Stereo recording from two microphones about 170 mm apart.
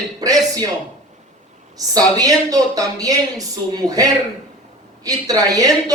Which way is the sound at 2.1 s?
20° right (ahead or behind).